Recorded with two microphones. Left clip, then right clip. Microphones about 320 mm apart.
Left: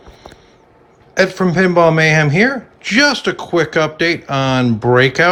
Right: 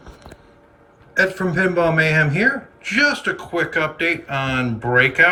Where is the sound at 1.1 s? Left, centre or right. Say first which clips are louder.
Left 4 dB; centre.